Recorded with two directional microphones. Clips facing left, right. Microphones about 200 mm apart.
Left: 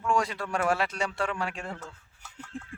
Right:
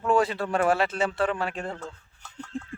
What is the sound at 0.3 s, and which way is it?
Speech, 30° right (ahead or behind).